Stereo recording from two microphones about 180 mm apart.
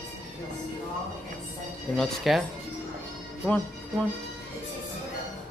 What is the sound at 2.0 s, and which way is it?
Speech, centre (ahead or behind).